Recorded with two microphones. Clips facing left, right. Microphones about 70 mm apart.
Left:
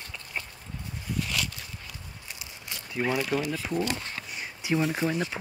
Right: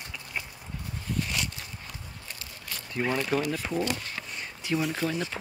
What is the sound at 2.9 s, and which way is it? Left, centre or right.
Speech, centre.